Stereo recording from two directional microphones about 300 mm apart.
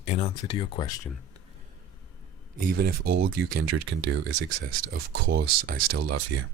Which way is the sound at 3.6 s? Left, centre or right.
Right.